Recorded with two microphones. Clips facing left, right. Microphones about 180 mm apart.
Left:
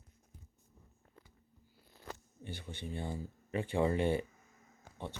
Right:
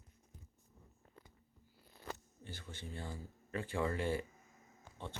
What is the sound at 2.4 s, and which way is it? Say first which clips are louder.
Speech: left 5 dB; 15° left (ahead or behind).